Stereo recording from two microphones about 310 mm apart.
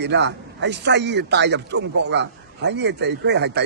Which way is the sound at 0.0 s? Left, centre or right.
Right.